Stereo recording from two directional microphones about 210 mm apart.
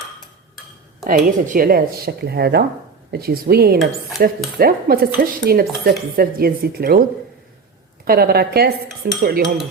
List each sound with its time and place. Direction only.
1.0 s dishes: 40° right (ahead or behind)
8.0 s dishes: 45° right (ahead or behind)